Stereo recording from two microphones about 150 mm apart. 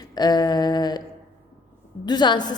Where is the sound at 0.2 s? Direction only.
25° left (ahead or behind).